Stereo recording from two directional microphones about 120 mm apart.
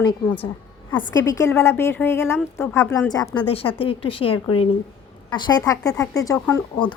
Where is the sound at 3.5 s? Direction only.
50° left (ahead or behind).